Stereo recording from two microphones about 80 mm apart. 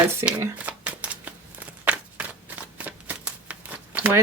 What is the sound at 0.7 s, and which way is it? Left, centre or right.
Shuffling cards, centre.